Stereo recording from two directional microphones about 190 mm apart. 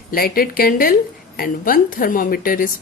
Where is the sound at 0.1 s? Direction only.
50° left (ahead or behind).